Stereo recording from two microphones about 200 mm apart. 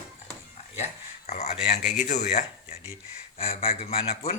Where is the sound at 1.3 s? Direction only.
35° left (ahead or behind).